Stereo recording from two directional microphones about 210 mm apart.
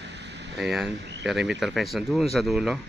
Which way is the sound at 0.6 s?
Centre (ahead or behind).